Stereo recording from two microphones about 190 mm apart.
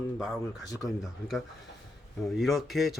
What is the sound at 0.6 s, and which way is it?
Speech, 20° left (ahead or behind).